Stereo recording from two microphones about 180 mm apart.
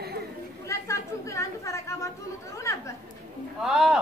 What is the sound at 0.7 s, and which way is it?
Chatter, 15° left (ahead or behind).